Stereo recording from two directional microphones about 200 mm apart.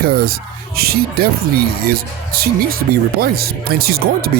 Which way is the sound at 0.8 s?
50° right (ahead or behind).